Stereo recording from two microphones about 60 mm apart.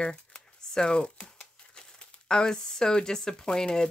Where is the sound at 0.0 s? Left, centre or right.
Centre.